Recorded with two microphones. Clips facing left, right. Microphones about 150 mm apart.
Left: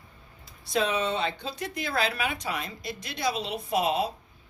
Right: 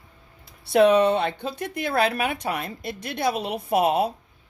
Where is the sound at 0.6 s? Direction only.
65° right (ahead or behind).